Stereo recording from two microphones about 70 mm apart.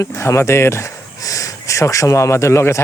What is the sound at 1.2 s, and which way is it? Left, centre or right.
Speech, left.